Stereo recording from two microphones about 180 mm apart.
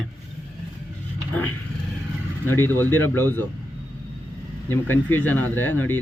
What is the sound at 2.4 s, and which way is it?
Speech, 10° left (ahead or behind).